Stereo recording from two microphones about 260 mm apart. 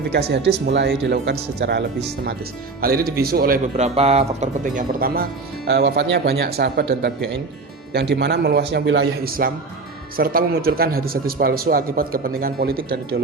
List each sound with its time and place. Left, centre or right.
0.1 s speech: right
2.8 s speech: right